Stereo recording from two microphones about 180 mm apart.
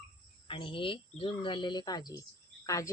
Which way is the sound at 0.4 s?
30° left (ahead or behind).